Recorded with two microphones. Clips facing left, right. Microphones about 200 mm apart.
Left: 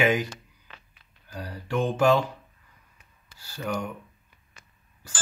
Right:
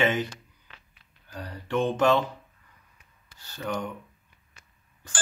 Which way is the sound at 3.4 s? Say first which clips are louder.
Left 1 dB; 10° left (ahead or behind).